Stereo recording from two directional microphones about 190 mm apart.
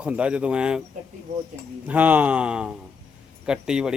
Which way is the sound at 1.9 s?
10° right (ahead or behind).